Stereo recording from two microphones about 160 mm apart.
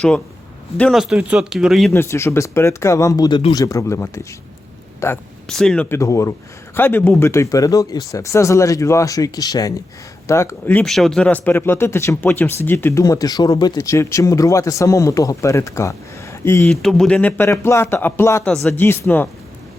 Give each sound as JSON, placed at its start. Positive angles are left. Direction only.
{"t": 0.8, "sound": "speech", "side_deg": 0}
{"t": 1.9, "sound": "speech", "side_deg": 15}
{"t": 5.5, "sound": "speech", "side_deg": 5}
{"t": 6.0, "sound": "speech", "side_deg": 20}
{"t": 16.6, "sound": "speech", "side_deg": 5}